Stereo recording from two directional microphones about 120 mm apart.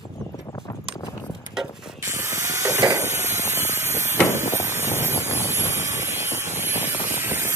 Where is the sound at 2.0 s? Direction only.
20° right (ahead or behind).